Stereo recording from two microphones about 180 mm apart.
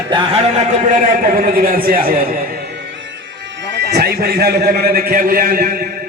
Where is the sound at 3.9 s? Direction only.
60° right (ahead or behind).